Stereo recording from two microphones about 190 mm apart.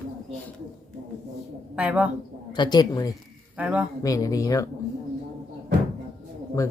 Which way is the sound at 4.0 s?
15° left (ahead or behind).